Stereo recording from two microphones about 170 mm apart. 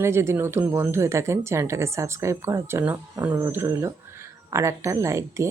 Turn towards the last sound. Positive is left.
turn(degrees=-15)  # may be behind; listen again after turning